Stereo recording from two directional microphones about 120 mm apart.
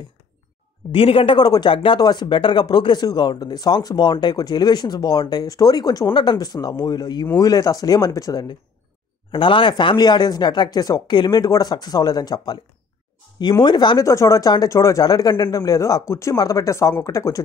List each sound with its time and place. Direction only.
0.9 s speech: 50° left (ahead or behind); by 8.5 s 30° left (ahead or behind)
9.3 s speech: 45° left (ahead or behind)
14.0 s speech: 25° left (ahead or behind)